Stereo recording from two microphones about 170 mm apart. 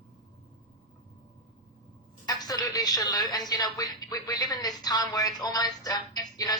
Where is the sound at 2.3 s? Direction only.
20° left (ahead or behind).